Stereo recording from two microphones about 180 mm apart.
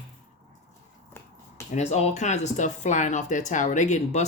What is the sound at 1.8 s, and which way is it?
Speech, 40° left (ahead or behind).